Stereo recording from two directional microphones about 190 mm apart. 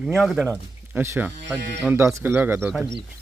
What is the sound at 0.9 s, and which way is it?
Speech, 10° right (ahead or behind).